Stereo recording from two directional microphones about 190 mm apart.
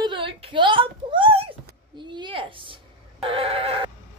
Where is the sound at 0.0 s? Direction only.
25° right (ahead or behind).